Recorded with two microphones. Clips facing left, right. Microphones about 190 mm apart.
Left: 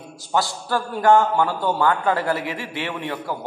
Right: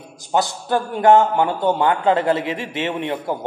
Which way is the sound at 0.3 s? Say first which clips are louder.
Right 3 dB; 20° right (ahead or behind).